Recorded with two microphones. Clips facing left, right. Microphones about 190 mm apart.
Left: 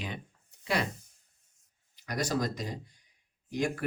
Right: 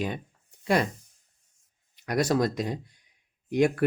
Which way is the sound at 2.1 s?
65° right (ahead or behind).